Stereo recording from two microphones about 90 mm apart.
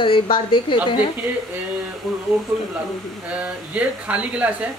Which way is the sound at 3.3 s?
15° right (ahead or behind).